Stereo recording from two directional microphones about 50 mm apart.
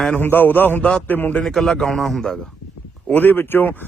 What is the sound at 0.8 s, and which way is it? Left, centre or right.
Speech, centre.